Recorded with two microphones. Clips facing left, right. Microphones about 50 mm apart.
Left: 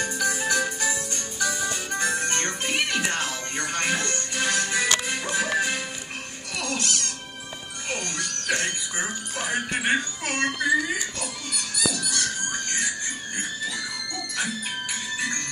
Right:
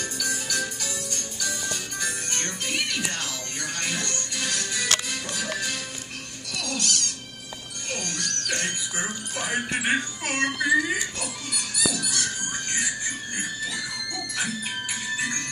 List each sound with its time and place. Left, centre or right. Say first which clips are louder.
0.0 s music: left 5 dB; left
7.9 s music: left 1 dB; centre
11.9 s a sound: left 1 dB; centre
13.4 s music: left 1 dB; centre